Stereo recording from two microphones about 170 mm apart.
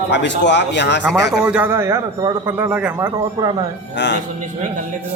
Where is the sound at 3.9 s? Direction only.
90° left.